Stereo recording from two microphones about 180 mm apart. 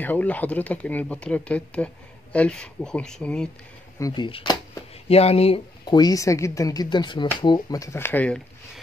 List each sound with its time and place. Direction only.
0.0 s speech: 10° left (ahead or behind)
4.0 s speech: 25° left (ahead or behind); by 8.8 s 5° left (ahead or behind)